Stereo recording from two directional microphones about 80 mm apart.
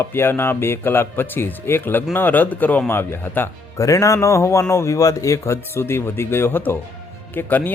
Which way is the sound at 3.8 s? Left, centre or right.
Left.